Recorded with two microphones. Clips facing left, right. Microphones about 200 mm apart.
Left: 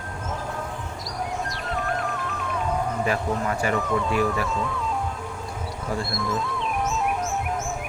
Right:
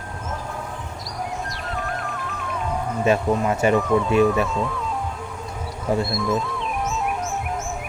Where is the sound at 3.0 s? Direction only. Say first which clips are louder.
Right 5 dB; 25° right (ahead or behind).